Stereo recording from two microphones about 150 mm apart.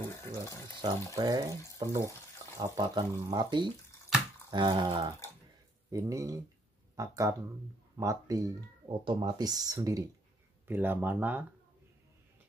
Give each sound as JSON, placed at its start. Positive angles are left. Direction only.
{"t": 0.0, "sound": "water", "side_deg": 20}
{"t": 0.8, "sound": "speech", "side_deg": -25}
{"t": 4.5, "sound": "a sound", "side_deg": -30}
{"t": 5.9, "sound": "speech", "side_deg": -20}
{"t": 10.7, "sound": "speech", "side_deg": -15}